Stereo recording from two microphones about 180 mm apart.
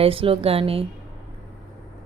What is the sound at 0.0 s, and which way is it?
Speech, 30° right (ahead or behind).